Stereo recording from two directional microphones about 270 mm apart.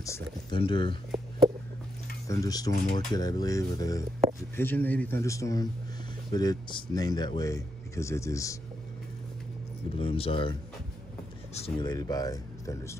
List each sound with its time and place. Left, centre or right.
0.0 s speech: centre
2.2 s speech: centre
9.9 s speech: centre
11.5 s speech: centre